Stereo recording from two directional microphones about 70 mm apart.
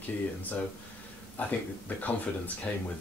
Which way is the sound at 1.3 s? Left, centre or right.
Left.